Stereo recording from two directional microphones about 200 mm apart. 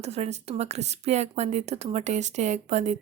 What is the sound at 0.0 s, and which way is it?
Speech, 30° right (ahead or behind).